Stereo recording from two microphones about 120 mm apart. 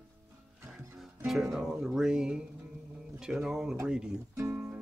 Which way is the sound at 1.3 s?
5° right (ahead or behind).